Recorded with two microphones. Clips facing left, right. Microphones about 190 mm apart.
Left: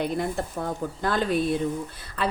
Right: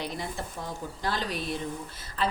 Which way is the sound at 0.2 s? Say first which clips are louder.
Left 8 dB; 55° left (ahead or behind).